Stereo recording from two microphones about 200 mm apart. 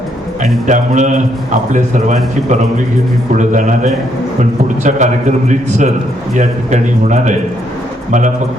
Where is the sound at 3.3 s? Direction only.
40° right (ahead or behind).